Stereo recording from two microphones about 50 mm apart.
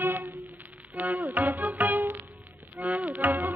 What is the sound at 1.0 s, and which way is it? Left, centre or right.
Music, right.